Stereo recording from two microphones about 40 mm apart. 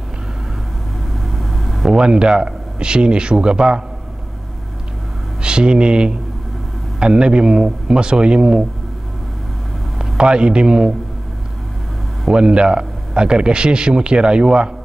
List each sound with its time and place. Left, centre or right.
1.4 s vehicle: centre
1.9 s a man's voice: right
5.4 s a man's voice: right
9.9 s a man's voice: right
12.3 s a man's voice: right